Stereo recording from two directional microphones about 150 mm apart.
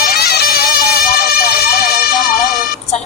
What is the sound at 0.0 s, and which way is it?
Music, 90° left.